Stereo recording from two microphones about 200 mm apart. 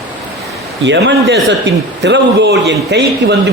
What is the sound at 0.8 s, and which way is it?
A man's voice, 60° right (ahead or behind).